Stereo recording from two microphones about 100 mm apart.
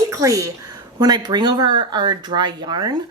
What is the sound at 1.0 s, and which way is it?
Speech, 45° right (ahead or behind).